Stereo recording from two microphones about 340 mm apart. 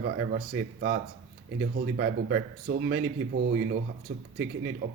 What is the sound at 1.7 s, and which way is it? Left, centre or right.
Speech, right.